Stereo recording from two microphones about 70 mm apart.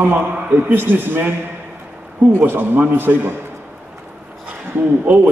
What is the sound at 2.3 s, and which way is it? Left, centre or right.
A man's voice, right.